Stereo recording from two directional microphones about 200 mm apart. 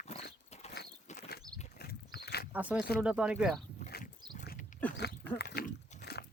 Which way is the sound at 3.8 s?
50° left (ahead or behind).